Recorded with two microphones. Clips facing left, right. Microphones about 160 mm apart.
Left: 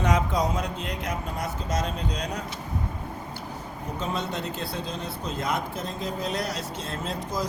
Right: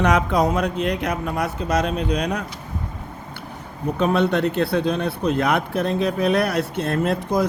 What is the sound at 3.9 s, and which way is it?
Speech, 65° right (ahead or behind).